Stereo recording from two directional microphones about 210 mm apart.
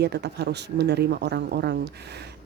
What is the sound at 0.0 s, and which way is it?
Speech, 50° right (ahead or behind).